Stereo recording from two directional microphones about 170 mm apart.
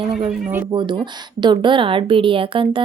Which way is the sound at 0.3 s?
10° right (ahead or behind).